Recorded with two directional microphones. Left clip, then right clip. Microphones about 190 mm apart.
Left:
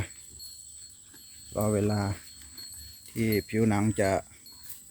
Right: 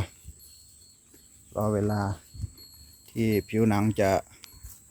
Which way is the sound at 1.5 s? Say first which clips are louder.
Right 1 dB; 5° left (ahead or behind).